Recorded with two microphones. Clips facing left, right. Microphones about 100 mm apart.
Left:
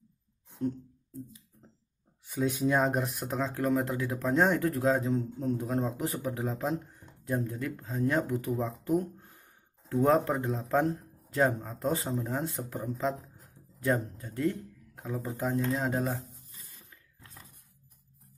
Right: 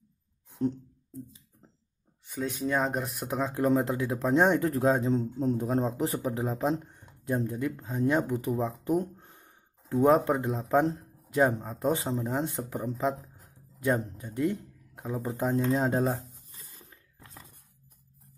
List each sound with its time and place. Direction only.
2.2 s speech: centre (ahead or behind)
3.3 s speech: 15° right (ahead or behind)
15.7 s a sound: 30° right (ahead or behind)